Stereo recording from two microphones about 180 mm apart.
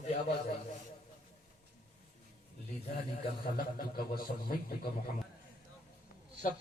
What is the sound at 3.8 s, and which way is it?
A man's voice, 55° left (ahead or behind).